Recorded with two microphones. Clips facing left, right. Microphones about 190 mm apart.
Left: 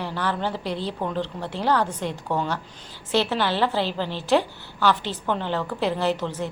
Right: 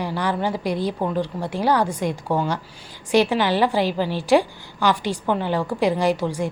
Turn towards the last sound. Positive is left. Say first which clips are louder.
# right 4 dB
turn(degrees=-10)  # may be behind; listen again after turning